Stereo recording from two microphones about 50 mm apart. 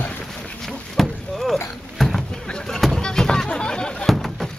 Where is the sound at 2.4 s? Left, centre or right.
Centre.